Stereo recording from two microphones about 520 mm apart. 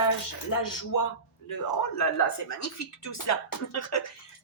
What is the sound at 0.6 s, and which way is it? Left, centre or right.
A man's voice, left.